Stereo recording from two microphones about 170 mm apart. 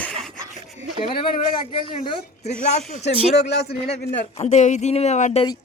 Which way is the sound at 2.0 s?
40° left (ahead or behind).